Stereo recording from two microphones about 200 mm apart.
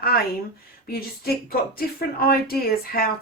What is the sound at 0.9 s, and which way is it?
Speech, 50° left (ahead or behind).